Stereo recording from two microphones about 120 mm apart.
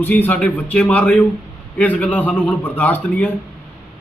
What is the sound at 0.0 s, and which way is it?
Speech, 15° left (ahead or behind).